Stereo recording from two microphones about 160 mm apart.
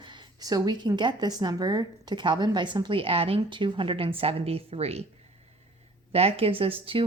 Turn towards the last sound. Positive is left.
turn(degrees=-35)  # may be behind; listen again after turning